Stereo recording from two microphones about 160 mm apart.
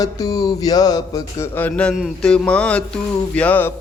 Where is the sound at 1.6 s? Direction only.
10° left (ahead or behind).